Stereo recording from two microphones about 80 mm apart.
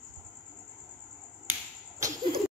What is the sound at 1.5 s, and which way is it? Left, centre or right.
Cricket, right.